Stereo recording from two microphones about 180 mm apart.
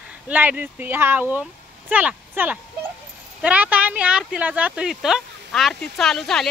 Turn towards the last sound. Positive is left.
turn(degrees=0)  # may be behind; listen again after turning